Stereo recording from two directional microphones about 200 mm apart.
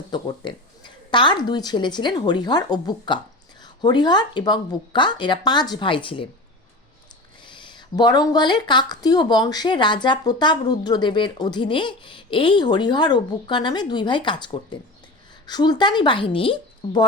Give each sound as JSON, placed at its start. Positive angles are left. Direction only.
{"t": 0.1, "sound": "a woman's voice", "side_deg": 20}
{"t": 7.4, "sound": "a woman's voice", "side_deg": 25}